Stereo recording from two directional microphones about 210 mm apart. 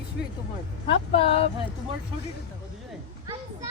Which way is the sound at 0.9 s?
25° left (ahead or behind).